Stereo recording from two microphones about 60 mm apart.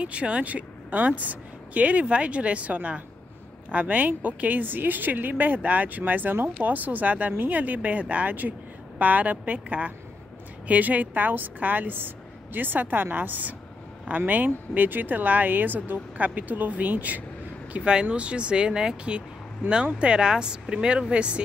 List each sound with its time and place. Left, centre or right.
0.0 s a woman's voice: right